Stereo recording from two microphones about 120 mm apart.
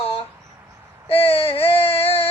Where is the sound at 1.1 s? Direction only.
55° left (ahead or behind).